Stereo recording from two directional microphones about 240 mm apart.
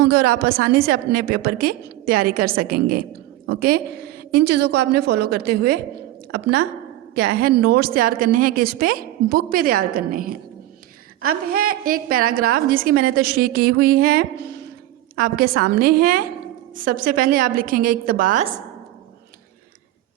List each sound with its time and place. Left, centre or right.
0.0 s a woman's voice: right
11.5 s a woman's voice: right